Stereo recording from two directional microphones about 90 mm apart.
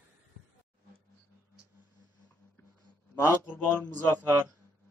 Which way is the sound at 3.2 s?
25° right (ahead or behind).